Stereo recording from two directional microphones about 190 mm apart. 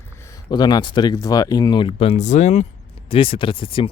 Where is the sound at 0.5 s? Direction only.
20° left (ahead or behind).